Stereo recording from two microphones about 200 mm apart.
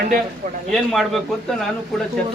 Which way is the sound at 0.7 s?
Centre (ahead or behind).